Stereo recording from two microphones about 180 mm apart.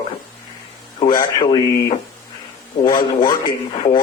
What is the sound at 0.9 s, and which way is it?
Speech, 25° left (ahead or behind).